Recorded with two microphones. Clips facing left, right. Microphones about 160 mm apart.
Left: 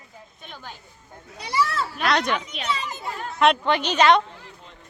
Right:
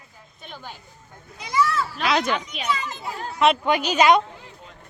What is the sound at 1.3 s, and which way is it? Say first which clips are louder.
Speech: right 2 dB; 35° left (ahead or behind).